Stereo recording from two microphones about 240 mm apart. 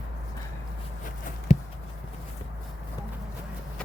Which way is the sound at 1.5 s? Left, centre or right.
Left.